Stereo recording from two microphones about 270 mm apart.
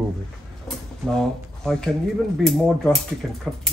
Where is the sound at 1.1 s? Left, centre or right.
Centre.